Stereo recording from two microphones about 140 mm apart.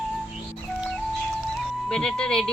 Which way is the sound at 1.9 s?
5° left (ahead or behind).